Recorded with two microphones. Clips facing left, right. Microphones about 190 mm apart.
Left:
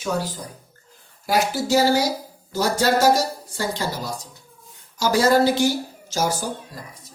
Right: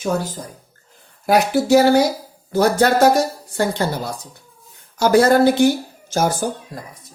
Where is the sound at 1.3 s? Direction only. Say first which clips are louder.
Right 6 dB; 60° right (ahead or behind).